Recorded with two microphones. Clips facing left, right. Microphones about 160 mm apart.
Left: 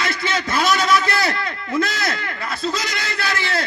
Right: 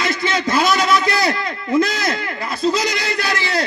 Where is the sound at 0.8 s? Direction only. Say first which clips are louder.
Right 2 dB; 35° right (ahead or behind).